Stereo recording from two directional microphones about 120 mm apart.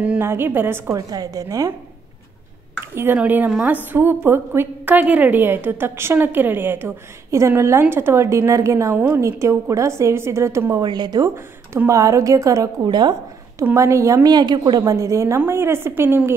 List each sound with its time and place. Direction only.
0.0 s a woman's voice: 15° right (ahead or behind)
0.9 s a woman's voice: 30° right (ahead or behind)
2.8 s a woman's voice: 20° right (ahead or behind)
10.8 s speech: 35° right (ahead or behind)
11.3 s a woman's voice: 20° right (ahead or behind)
13.7 s a woman's voice: 25° right (ahead or behind)